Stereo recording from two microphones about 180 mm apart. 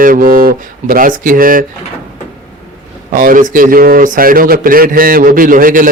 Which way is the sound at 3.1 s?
50° right (ahead or behind).